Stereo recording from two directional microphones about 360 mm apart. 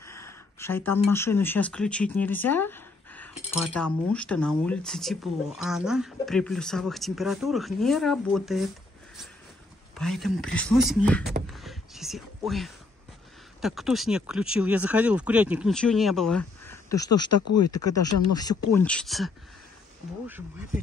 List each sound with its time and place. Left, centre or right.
0.0 s a sound: centre
1.1 s speech: centre
9.9 s speech: centre
11.4 s a sound: centre
13.6 s speech: centre
17.5 s speech: left
18.3 s speech: centre